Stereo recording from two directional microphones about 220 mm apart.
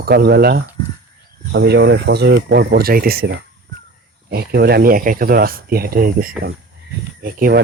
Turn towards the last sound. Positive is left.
turn(degrees=-40)  # may be behind; listen again after turning